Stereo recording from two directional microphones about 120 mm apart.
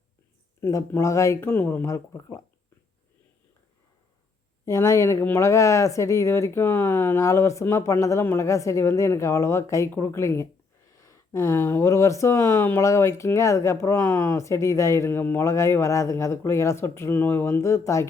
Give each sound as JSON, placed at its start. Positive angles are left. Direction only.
{"t": 0.6, "sound": "speech", "side_deg": 25}
{"t": 4.6, "sound": "speech", "side_deg": 25}